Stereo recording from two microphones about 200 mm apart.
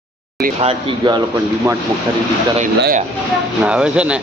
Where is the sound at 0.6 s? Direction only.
30° right (ahead or behind).